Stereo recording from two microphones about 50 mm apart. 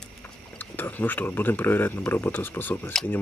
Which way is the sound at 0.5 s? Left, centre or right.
Left.